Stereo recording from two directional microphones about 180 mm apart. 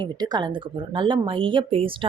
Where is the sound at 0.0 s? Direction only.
25° right (ahead or behind).